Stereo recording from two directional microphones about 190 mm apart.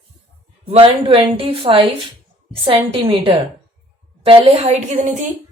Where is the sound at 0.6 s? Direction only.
30° right (ahead or behind).